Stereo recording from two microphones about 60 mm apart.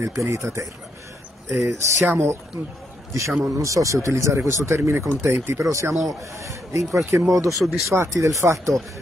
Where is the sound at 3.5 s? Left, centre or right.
Right.